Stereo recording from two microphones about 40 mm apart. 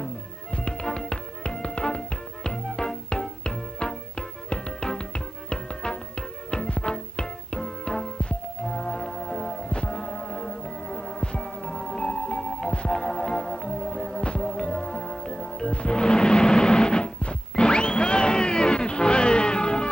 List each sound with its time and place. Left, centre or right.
0.5 s music: left
2.7 s music: centre
15.7 s music: left